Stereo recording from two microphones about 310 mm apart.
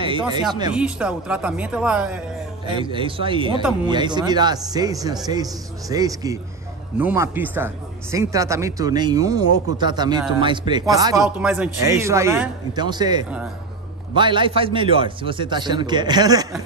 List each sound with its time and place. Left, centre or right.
0.0 s speech: centre
0.7 s speech: centre
2.6 s speech: centre